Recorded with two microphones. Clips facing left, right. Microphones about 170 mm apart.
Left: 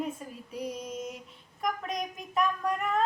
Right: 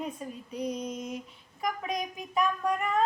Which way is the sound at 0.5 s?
5° left (ahead or behind).